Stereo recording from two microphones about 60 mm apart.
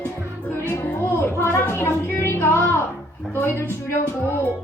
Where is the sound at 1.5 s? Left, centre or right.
Left.